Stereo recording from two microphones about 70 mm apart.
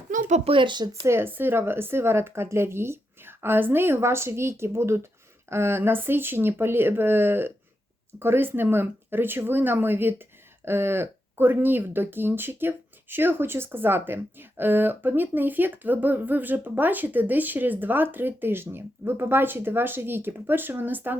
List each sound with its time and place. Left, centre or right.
0.7 s speech: right
1.0 s speech: right